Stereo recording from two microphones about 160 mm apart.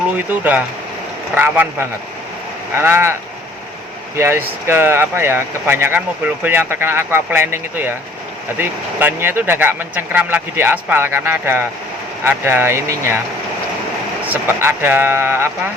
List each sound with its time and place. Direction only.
0.3 s speech: 10° right (ahead or behind)
4.2 s speech: 15° right (ahead or behind)
14.3 s speech: 15° right (ahead or behind)